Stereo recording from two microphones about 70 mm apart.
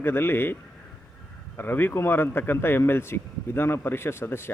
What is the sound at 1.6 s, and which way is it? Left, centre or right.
A man's voice, left.